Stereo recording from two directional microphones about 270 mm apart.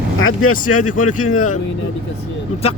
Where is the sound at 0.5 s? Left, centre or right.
Left.